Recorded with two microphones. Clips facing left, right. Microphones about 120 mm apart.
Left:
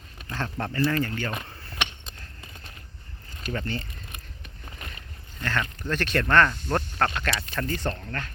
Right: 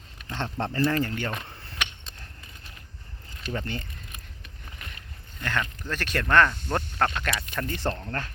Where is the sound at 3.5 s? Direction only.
15° right (ahead or behind).